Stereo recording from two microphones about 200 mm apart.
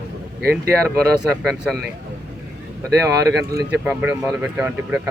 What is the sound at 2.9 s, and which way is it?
Speech, 15° right (ahead or behind).